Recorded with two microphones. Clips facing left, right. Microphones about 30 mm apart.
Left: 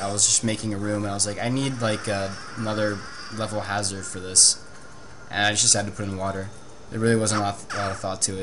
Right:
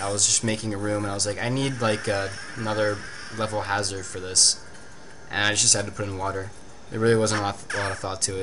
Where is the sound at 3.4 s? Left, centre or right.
Centre.